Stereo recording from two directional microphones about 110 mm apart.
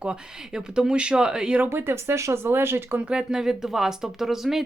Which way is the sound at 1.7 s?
20° right (ahead or behind).